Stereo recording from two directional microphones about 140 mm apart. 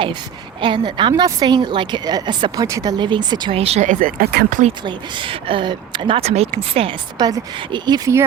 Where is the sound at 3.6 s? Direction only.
50° right (ahead or behind); by 4.7 s 70° right (ahead or behind).